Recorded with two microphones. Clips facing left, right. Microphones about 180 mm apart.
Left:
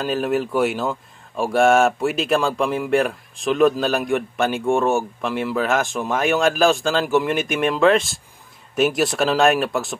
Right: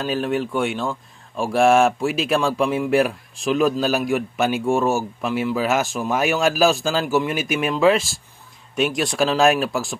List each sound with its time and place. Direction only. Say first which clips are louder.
0.0 s speech: left 1 dB; centre (ahead or behind)